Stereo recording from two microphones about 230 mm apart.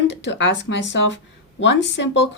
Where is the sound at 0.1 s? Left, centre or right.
Left.